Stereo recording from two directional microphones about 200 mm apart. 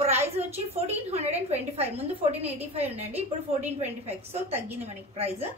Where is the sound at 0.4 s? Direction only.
35° right (ahead or behind).